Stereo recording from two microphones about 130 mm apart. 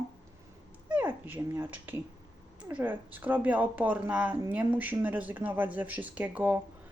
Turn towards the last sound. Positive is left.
turn(degrees=-15)  # may be behind; listen again after turning